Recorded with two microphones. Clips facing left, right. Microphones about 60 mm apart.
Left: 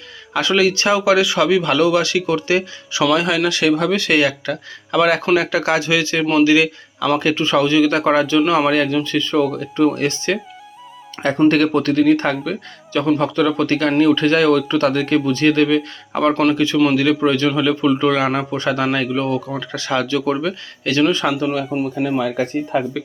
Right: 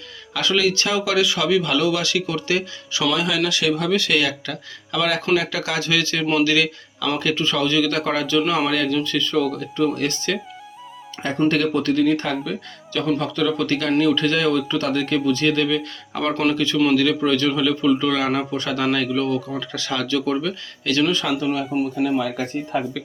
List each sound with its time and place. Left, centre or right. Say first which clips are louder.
0.3 s a man's voice: left 4 dB; left
3.2 s a man's voice: left 4 dB; left
8.7 s a man's voice: left 4 dB; left
11.4 s speech: left 4 dB; left
12.9 s a man's voice: left 5 dB; left
14.4 s a man's voice: left 5 dB; left
16.3 s speech: left 3 dB; centre
16.9 s a man's voice: left 2 dB; left